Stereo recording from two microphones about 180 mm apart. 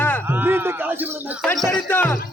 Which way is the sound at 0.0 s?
10° left (ahead or behind).